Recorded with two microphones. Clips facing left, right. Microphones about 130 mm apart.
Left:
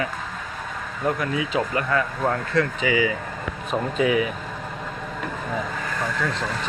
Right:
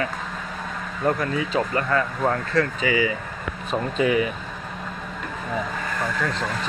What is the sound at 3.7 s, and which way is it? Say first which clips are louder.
Speech: even; centre (ahead or behind).